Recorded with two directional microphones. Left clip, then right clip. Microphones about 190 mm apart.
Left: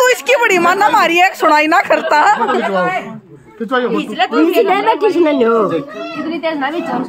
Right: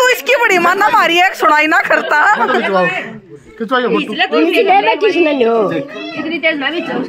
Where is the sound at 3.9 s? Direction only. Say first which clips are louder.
Right 1 dB; 35° left (ahead or behind).